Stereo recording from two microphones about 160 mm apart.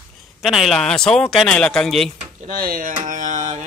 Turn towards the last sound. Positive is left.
turn(degrees=-50)  # may be behind; listen again after turning